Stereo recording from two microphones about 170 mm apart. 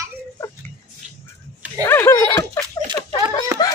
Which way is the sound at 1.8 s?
15° left (ahead or behind).